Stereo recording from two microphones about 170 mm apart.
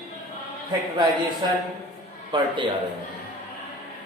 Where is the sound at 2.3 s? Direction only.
25° right (ahead or behind).